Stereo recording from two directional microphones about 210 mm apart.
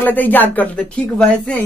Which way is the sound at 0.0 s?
10° left (ahead or behind).